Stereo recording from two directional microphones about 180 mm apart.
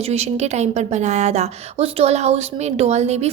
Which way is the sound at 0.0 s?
35° right (ahead or behind).